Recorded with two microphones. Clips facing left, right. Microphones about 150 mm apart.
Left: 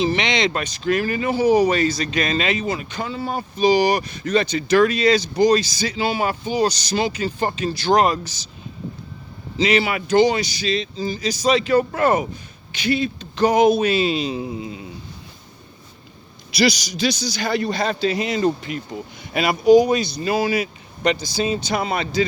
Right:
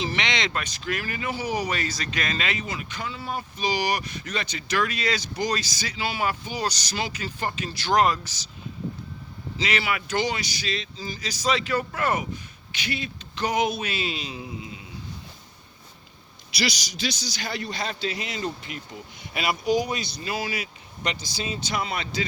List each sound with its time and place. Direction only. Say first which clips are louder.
0.0 s speech: left 8 dB; 20° left (ahead or behind)
9.6 s speech: left 8 dB; 25° left (ahead or behind)
16.6 s a man's voice: left 9 dB; 45° left (ahead or behind)